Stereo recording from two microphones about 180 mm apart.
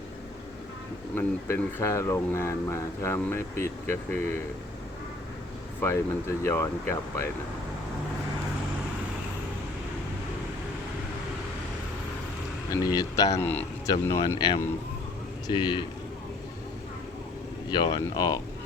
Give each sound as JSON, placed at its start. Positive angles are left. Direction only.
{"t": 1.1, "sound": "speech", "side_deg": 15}
{"t": 5.8, "sound": "speech", "side_deg": 15}
{"t": 12.7, "sound": "speech", "side_deg": 20}
{"t": 13.4, "sound": "a man's voice", "side_deg": 10}
{"t": 13.9, "sound": "speech", "side_deg": 20}
{"t": 17.7, "sound": "speech", "side_deg": 25}